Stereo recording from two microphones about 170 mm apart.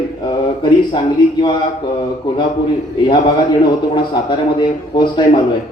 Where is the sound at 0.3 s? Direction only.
25° left (ahead or behind).